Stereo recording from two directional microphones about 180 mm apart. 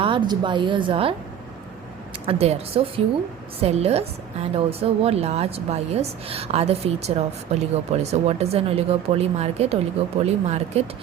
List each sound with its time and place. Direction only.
0.0 s a woman's voice: 25° right (ahead or behind)
2.2 s a woman's voice: 35° right (ahead or behind)